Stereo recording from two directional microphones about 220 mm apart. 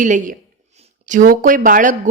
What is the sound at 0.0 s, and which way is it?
A woman's voice, 35° right (ahead or behind).